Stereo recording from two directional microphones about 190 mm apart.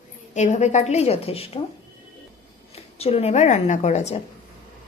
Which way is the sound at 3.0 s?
35° left (ahead or behind).